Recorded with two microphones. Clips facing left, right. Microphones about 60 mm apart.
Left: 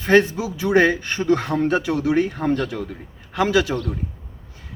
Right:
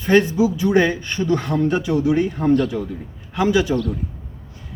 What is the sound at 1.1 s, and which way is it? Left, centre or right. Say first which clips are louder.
Speech: even; left.